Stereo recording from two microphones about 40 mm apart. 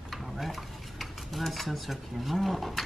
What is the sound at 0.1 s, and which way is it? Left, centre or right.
Stir, centre.